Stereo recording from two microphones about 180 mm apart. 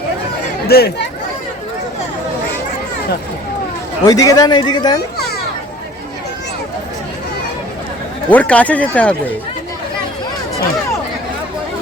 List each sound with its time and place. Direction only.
0.7 s speech: 60° left (ahead or behind)
4.0 s speech: 20° left (ahead or behind)
8.3 s speech: 10° left (ahead or behind)